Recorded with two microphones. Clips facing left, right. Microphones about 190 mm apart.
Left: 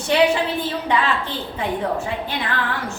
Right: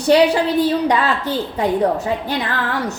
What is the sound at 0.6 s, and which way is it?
A woman's voice, 40° right (ahead or behind).